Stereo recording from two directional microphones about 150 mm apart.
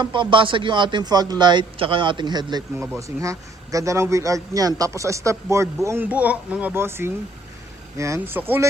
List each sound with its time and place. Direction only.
0.0 s a man's voice: 35° right (ahead or behind)
2.7 s a man's voice: 15° right (ahead or behind)